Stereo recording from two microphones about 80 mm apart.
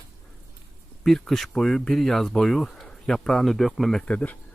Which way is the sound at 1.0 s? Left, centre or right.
Centre.